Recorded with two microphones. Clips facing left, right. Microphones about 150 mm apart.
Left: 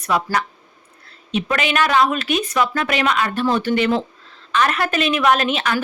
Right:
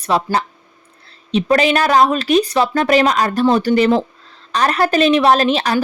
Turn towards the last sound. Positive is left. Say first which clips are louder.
# right 4 dB
turn(degrees=-35)  # may be behind; listen again after turning